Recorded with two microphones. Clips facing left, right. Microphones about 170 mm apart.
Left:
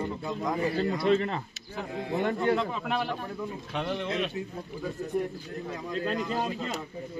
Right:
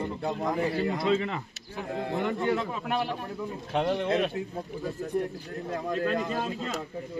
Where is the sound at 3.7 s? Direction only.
45° right (ahead or behind).